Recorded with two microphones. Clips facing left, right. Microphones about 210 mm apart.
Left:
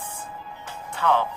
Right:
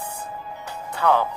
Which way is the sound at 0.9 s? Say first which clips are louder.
Right 2 dB; 40° right (ahead or behind).